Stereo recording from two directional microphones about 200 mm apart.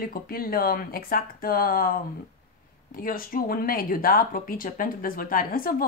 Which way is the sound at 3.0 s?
45° left (ahead or behind).